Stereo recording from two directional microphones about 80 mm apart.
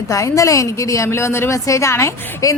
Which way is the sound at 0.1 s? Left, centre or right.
Left.